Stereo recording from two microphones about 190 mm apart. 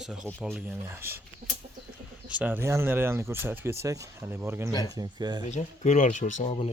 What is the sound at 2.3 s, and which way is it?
Speech, 5° right (ahead or behind).